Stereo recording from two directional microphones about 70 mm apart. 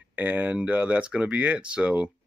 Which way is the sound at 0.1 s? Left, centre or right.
Right.